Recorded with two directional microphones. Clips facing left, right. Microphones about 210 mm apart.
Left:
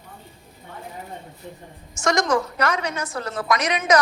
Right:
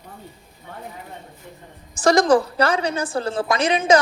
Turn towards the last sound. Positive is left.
turn(degrees=-30)  # may be behind; listen again after turning